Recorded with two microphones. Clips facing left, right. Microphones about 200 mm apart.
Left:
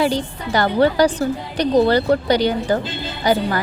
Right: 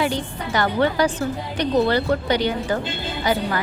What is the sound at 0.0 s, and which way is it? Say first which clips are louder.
A woman's voice: left 4 dB; 35° left (ahead or behind).